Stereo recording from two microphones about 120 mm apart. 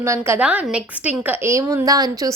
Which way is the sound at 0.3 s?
10° right (ahead or behind).